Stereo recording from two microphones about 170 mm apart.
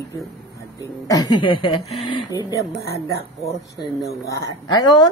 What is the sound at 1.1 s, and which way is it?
Speech, 25° left (ahead or behind).